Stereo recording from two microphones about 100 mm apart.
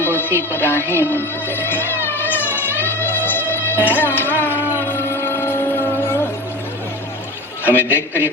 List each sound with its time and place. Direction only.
0.0 s music: 20° left (ahead or behind)
7.6 s a man's voice: 20° left (ahead or behind)